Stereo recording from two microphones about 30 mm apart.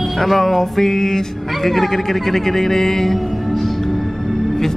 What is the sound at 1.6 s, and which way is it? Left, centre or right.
Speech, centre.